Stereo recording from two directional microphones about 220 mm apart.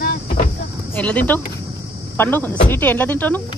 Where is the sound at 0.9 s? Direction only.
5° left (ahead or behind).